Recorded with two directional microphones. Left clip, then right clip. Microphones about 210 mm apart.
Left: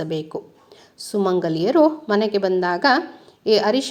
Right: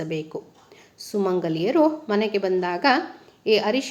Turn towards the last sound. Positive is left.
turn(degrees=20)  # may be behind; listen again after turning